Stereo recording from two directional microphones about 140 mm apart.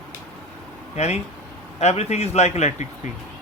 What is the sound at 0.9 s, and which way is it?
Speech, 50° left (ahead or behind).